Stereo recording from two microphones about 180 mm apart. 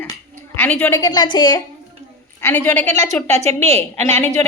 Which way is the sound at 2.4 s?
10° left (ahead or behind).